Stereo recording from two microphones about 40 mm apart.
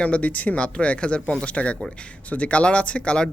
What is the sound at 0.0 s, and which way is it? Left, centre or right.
Speech, left.